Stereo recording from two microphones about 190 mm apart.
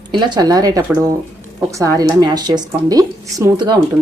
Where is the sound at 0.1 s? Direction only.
20° right (ahead or behind).